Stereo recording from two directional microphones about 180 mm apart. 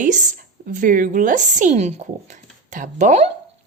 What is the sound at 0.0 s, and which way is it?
Speech, 45° right (ahead or behind).